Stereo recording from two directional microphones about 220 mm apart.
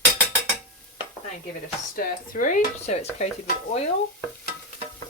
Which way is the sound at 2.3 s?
40° left (ahead or behind).